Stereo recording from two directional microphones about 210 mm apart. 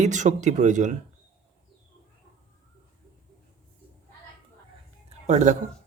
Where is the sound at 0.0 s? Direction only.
35° right (ahead or behind).